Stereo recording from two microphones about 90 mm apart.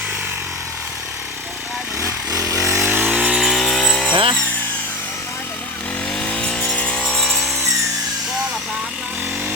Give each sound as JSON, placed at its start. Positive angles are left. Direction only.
{"t": 2.0, "sound": "a sound", "side_deg": -40}
{"t": 2.8, "sound": "power tool", "side_deg": -15}
{"t": 3.2, "sound": "chainsaw", "side_deg": -5}
{"t": 3.8, "sound": "vehicle", "side_deg": 15}
{"t": 4.1, "sound": "sawing", "side_deg": -75}
{"t": 6.1, "sound": "vehicle", "side_deg": 10}